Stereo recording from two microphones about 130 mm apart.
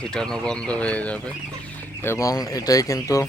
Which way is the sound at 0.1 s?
5° left (ahead or behind).